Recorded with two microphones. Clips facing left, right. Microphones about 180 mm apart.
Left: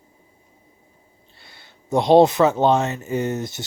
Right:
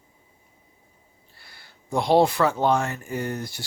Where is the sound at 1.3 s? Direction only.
20° left (ahead or behind).